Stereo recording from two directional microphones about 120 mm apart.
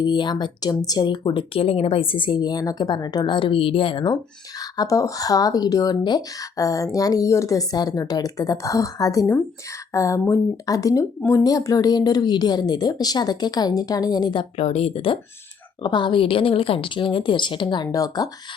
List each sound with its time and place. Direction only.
0.0 s speech: 40° left (ahead or behind)
4.6 s speech: 30° left (ahead or behind)
14.5 s speech: 55° left (ahead or behind)
15.8 s a woman's voice: 40° left (ahead or behind)